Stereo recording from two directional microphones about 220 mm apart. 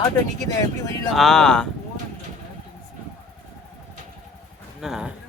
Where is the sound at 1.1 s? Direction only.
Centre (ahead or behind).